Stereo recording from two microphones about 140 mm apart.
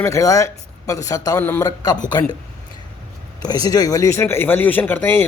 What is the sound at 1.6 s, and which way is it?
Speech, 25° left (ahead or behind).